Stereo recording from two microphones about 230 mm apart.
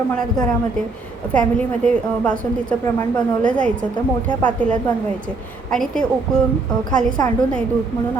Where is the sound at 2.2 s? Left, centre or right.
Centre.